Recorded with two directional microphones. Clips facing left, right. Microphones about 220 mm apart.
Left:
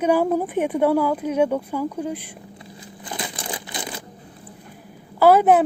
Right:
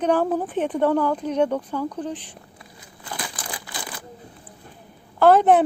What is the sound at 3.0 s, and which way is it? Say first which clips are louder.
Crumpling: left 3 dB; 25° left (ahead or behind).